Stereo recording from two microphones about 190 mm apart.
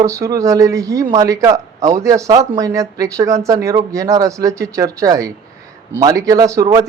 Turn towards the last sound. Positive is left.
turn(degrees=-20)  # may be behind; listen again after turning